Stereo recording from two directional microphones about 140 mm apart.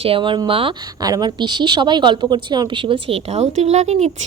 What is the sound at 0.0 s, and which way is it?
Speech, 40° right (ahead or behind).